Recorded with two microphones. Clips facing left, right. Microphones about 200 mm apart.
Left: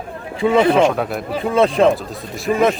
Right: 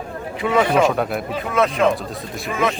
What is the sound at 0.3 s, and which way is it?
Speech, 25° left (ahead or behind).